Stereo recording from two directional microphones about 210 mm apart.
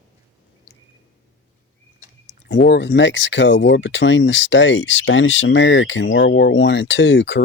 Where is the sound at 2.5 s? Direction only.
60° left (ahead or behind).